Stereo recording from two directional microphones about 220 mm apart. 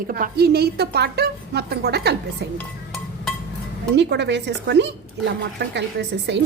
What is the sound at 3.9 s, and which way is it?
A woman's voice, 50° right (ahead or behind).